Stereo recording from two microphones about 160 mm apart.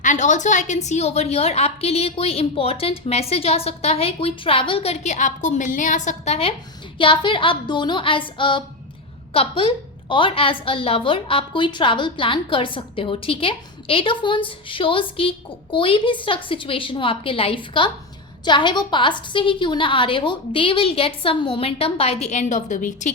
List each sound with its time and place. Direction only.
0.0 s a woman's voice: 50° left (ahead or behind)
7.0 s a woman's voice: 30° left (ahead or behind); by 23.1 s 50° left (ahead or behind)